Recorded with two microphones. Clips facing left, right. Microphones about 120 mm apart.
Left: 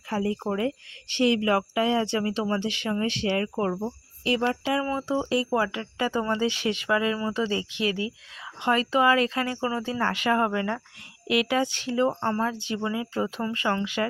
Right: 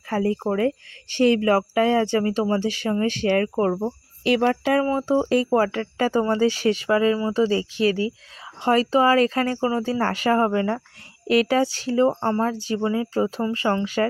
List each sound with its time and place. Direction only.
0.1 s speech: 50° right (ahead or behind)
4.2 s speech: 70° right (ahead or behind)
4.6 s speech: 55° right (ahead or behind)
4.9 s speech: 40° right (ahead or behind)